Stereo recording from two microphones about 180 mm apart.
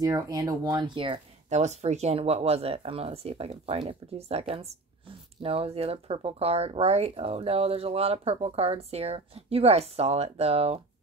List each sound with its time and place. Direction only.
0.0 s speech: 20° right (ahead or behind)
1.5 s speech: 40° right (ahead or behind)